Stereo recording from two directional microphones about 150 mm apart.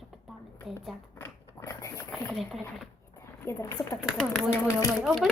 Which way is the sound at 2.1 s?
Centre (ahead or behind).